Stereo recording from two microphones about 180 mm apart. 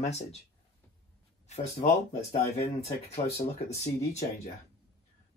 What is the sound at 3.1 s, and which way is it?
Speech, 35° left (ahead or behind).